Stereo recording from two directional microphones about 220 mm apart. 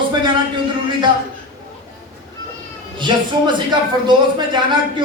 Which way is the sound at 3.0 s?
20° right (ahead or behind).